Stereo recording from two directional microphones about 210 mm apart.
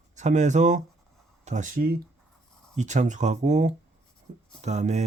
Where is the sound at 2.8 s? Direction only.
35° right (ahead or behind).